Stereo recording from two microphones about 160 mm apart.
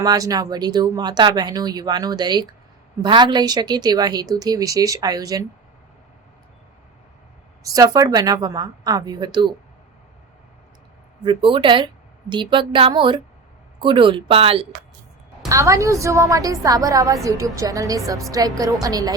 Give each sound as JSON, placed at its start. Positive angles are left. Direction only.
{"t": 0.0, "sound": "speech", "side_deg": -25}
{"t": 7.6, "sound": "speech", "side_deg": -20}
{"t": 11.2, "sound": "speech", "side_deg": -30}
{"t": 15.4, "sound": "speech", "side_deg": -20}